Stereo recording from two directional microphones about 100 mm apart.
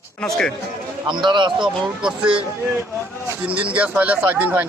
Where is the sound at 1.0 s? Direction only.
50° right (ahead or behind).